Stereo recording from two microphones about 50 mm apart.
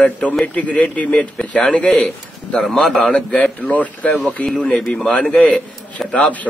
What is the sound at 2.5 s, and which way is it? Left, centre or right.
Speech, centre.